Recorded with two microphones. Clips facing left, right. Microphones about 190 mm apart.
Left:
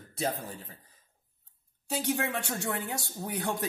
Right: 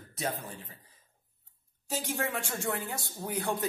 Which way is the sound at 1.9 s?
65° left (ahead or behind).